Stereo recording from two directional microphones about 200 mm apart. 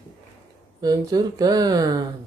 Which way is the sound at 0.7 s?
20° right (ahead or behind).